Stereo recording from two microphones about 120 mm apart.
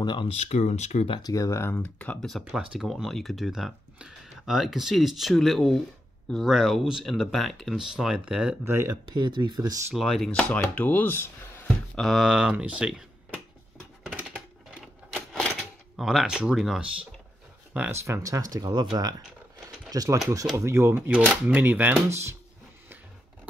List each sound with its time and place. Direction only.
0.0 s speech: 40° left (ahead or behind)
0.3 s speech: 65° left (ahead or behind)
1.1 s speech: 30° left (ahead or behind); by 2.3 s 10° left (ahead or behind)
2.3 s speech: 5° right (ahead or behind)
8.6 s speech: 20° right (ahead or behind)
9.1 s speech: 40° right (ahead or behind)
9.9 s speech: centre (ahead or behind)
10.7 s speech: 15° left (ahead or behind)
11.6 s speech: 5° left (ahead or behind)
16.0 s speech: centre (ahead or behind)
17.7 s speech: 15° right (ahead or behind)